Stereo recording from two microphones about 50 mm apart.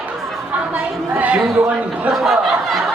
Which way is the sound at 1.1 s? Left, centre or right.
Right.